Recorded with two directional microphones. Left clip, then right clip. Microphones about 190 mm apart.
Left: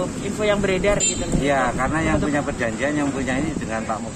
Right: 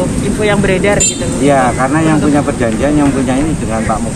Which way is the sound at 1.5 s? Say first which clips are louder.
Right 10 dB; 10° left (ahead or behind).